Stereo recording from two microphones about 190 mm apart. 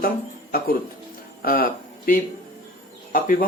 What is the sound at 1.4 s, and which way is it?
Speech, 50° left (ahead or behind).